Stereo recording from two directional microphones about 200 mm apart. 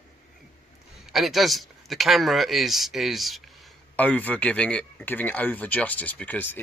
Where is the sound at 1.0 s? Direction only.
Centre (ahead or behind).